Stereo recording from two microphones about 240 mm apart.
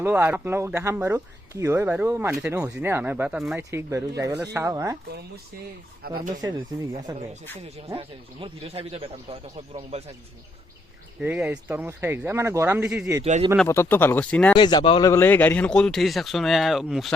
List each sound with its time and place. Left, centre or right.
0.0 s speech: centre
6.0 s speech: right
6.4 s speech: centre
11.2 s speech: centre
13.2 s speech: right
13.6 s speech: centre
14.5 s speech: centre